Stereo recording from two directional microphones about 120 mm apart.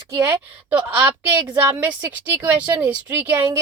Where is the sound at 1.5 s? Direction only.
15° right (ahead or behind).